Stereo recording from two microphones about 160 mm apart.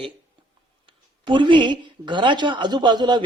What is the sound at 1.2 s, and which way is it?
A woman's voice, 30° right (ahead or behind).